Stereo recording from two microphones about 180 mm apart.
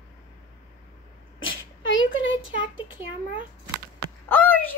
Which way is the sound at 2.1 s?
90° left.